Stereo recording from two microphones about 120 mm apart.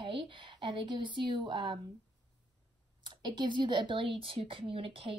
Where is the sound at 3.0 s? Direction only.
40° right (ahead or behind).